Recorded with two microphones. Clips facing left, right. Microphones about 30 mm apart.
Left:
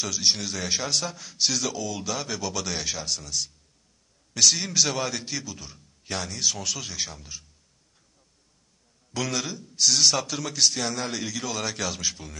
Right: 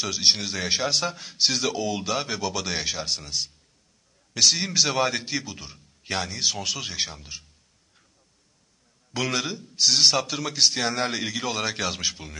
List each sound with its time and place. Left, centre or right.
0.0 s a man's voice: right
9.1 s a man's voice: centre